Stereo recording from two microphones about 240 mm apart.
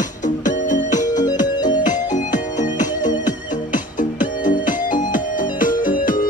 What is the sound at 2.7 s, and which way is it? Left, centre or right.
Music, centre.